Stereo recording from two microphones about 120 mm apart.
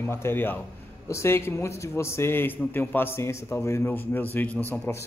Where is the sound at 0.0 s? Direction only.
20° left (ahead or behind).